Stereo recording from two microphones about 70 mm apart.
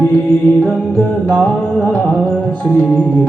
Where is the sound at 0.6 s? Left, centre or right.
Centre.